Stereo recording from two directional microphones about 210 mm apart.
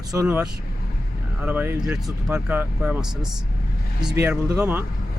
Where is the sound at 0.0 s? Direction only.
15° right (ahead or behind).